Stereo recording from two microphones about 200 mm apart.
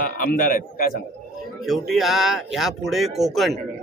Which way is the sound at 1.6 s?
Centre (ahead or behind).